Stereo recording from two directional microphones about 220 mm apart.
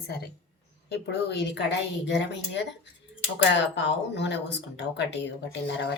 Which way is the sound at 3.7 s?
50° left (ahead or behind).